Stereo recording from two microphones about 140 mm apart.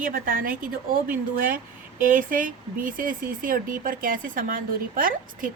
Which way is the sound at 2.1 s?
70° right (ahead or behind).